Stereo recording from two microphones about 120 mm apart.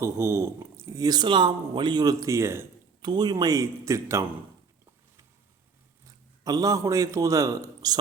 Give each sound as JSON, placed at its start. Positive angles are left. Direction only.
{"t": 0.0, "sound": "speech", "side_deg": -20}
{"t": 3.0, "sound": "a man's voice", "side_deg": -35}
{"t": 6.4, "sound": "speech", "side_deg": -30}